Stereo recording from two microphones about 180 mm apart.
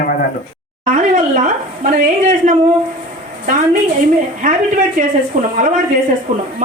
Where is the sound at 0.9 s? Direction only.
45° right (ahead or behind).